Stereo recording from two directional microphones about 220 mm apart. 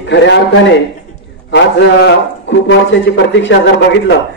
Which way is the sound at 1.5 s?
50° left (ahead or behind).